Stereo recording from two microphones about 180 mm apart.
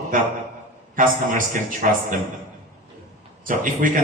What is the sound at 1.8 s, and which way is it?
Speech, 45° right (ahead or behind).